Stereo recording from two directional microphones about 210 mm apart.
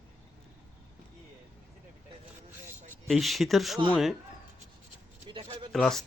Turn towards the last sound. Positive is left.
turn(degrees=0)  # may be behind; listen again after turning